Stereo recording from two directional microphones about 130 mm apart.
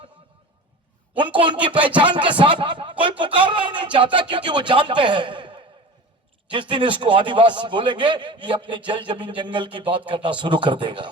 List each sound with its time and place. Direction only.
1.2 s a man's voice: 40° right (ahead or behind)